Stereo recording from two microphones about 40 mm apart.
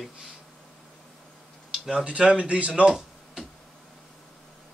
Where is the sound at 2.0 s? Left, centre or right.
Right.